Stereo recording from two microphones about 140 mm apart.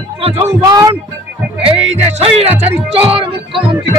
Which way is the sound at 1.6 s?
45° right (ahead or behind).